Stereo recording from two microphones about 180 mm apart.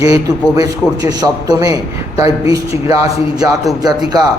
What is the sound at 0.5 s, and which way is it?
A man's voice, 20° right (ahead or behind).